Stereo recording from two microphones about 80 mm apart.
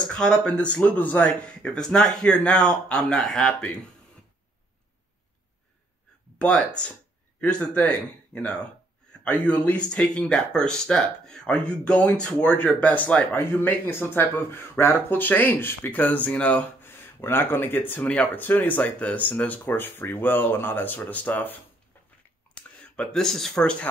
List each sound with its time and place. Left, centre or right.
0.1 s speech: centre
6.3 s speech: centre
13.4 s speech: left
16.8 s speech: left
22.5 s a sound: centre
23.2 s speech: centre